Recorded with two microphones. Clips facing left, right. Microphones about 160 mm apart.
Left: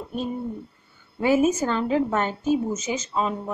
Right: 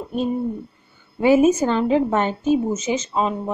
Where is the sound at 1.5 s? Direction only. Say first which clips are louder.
Right 5 dB; 15° right (ahead or behind).